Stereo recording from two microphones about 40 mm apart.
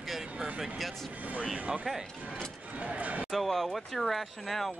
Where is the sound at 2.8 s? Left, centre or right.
Right.